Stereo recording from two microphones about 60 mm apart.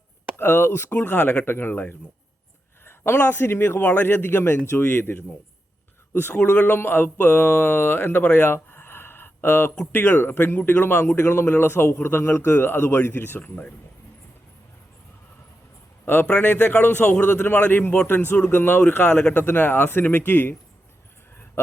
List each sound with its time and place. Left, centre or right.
0.3 s a man's voice: left
0.9 s speech: left
1.5 s a man's voice: left
6.2 s a man's voice: left
16.2 s a man's voice: left
19.1 s speech: left
19.5 s a man's voice: left